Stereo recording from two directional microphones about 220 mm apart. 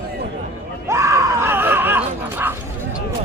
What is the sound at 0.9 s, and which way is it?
Screaming, 15° right (ahead or behind).